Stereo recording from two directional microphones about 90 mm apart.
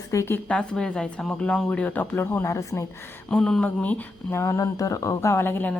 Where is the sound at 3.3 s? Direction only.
10° left (ahead or behind).